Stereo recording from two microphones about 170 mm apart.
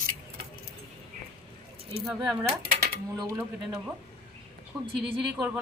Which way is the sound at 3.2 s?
20° right (ahead or behind).